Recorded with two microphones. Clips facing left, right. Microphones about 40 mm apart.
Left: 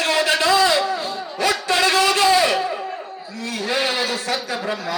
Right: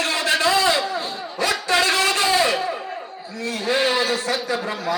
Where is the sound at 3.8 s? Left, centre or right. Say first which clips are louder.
Right 2 dB; right.